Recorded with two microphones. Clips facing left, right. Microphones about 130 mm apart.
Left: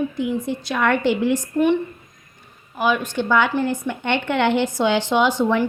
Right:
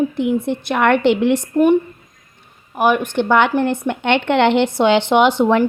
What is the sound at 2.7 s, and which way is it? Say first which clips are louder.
Speech: right 5 dB; 55° right (ahead or behind).